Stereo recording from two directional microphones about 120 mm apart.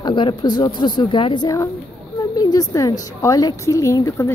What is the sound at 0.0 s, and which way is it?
A woman's voice, 40° left (ahead or behind).